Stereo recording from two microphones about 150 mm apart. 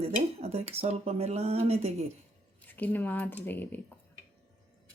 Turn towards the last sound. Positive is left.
turn(degrees=10)  # may be behind; listen again after turning